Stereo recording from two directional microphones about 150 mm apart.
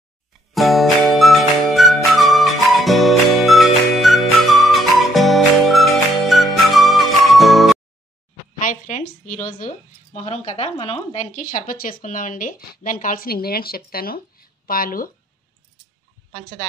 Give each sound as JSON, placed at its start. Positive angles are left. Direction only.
{"t": 0.5, "sound": "music", "side_deg": 0}
{"t": 8.5, "sound": "a sound", "side_deg": 60}
{"t": 10.1, "sound": "speech", "side_deg": 45}
{"t": 11.3, "sound": "speech", "side_deg": 65}